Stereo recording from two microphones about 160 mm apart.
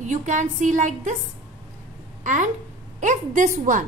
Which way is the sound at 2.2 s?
50° right (ahead or behind).